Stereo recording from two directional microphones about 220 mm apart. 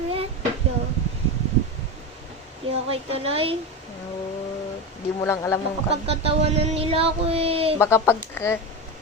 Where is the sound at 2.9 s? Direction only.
25° right (ahead or behind).